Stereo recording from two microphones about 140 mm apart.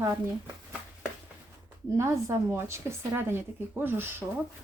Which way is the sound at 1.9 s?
20° right (ahead or behind).